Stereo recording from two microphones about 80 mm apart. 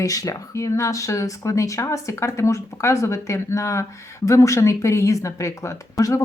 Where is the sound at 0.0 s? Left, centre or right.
Left.